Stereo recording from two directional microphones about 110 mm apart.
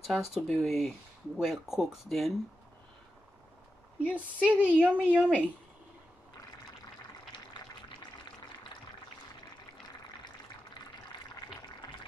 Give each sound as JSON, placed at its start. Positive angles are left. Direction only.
{"t": 0.0, "sound": "speech", "side_deg": 0}
{"t": 4.1, "sound": "a woman's voice", "side_deg": -10}
{"t": 11.8, "sound": "fill", "side_deg": 40}